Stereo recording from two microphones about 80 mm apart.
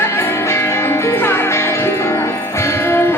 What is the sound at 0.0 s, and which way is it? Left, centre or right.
Music, left.